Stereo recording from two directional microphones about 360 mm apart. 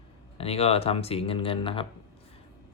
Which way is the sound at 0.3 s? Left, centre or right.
Centre.